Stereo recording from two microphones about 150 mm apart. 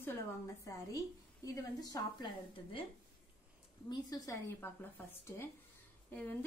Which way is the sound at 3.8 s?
25° left (ahead or behind).